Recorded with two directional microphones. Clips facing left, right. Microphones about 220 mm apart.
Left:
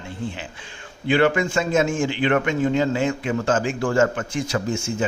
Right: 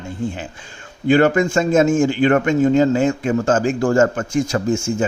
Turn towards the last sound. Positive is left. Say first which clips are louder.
# right 5 dB
turn(degrees=-45)  # may be behind; listen again after turning